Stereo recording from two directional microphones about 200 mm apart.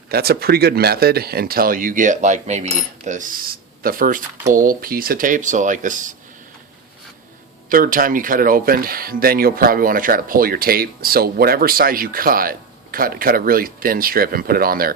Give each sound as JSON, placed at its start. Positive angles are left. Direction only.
{"t": 0.1, "sound": "speech", "side_deg": -50}
{"t": 7.7, "sound": "speech", "side_deg": -45}